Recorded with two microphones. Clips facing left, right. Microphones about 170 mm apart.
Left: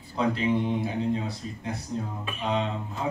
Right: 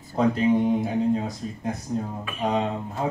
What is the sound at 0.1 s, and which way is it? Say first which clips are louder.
Speech: right 5 dB; 45° right (ahead or behind).